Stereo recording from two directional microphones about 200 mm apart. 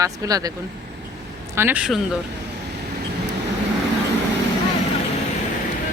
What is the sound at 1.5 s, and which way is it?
Speech, 10° right (ahead or behind).